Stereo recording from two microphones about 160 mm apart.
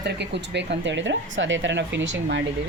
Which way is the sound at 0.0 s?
90° right.